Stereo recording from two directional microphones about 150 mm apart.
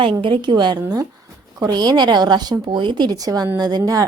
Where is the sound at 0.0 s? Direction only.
35° right (ahead or behind).